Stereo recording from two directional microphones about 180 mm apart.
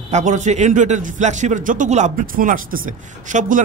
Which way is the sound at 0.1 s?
40° right (ahead or behind).